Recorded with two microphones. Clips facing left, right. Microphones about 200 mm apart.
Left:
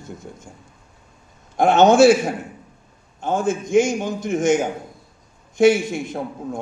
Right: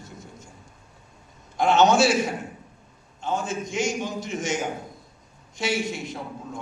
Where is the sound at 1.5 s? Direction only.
50° left (ahead or behind).